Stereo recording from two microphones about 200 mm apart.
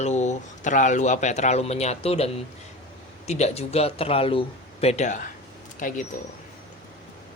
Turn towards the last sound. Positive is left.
turn(degrees=40)  # may be behind; listen again after turning